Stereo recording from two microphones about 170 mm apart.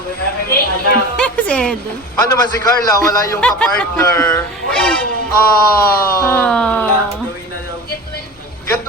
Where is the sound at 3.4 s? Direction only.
5° left (ahead or behind).